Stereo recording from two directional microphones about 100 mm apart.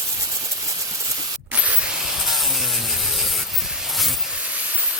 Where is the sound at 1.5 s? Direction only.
15° right (ahead or behind).